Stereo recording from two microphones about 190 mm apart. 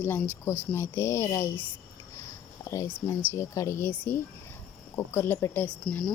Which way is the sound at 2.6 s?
15° left (ahead or behind).